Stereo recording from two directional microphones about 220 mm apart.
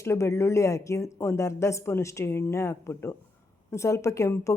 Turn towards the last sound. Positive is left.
turn(degrees=15)  # may be behind; listen again after turning